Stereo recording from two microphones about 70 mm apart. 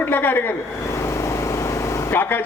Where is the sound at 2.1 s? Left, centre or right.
Left.